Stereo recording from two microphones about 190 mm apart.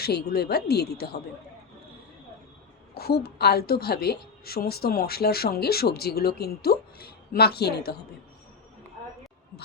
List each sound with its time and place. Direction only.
0.0 s a woman's voice: 55° left (ahead or behind)
2.9 s a woman's voice: 55° left (ahead or behind)